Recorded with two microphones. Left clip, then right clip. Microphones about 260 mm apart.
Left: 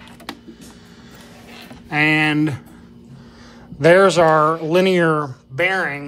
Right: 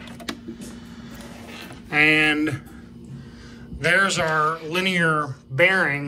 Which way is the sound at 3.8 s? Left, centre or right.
Centre.